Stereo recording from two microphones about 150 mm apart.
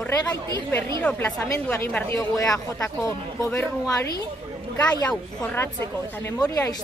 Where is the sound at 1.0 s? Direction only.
10° left (ahead or behind); by 4.2 s 25° left (ahead or behind).